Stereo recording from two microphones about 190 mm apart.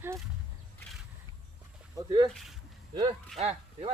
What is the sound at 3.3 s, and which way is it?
Speech, 35° right (ahead or behind).